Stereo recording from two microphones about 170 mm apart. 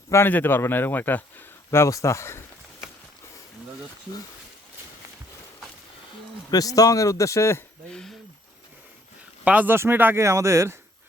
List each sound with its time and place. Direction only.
0.1 s speech: 15° left (ahead or behind)
6.5 s speech: 20° left (ahead or behind); by 8.1 s 5° left (ahead or behind)
9.4 s speech: 10° right (ahead or behind)